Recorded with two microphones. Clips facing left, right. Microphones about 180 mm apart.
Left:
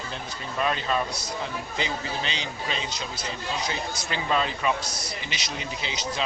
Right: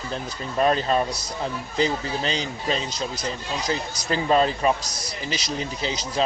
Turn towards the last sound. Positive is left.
turn(degrees=-40)  # may be behind; listen again after turning